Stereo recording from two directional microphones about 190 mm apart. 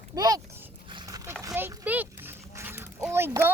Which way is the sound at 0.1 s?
20° right (ahead or behind).